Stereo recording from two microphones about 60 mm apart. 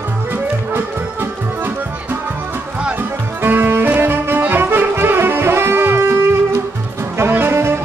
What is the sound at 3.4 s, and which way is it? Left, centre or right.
Music, right.